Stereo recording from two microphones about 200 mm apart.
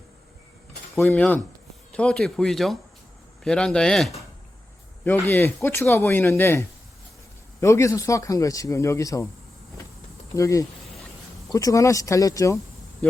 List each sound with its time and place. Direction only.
0.9 s speech: 5° left (ahead or behind)
10.3 s speech: 15° left (ahead or behind)